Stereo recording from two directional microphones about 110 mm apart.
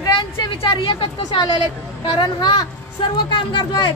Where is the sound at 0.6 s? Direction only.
50° left (ahead or behind).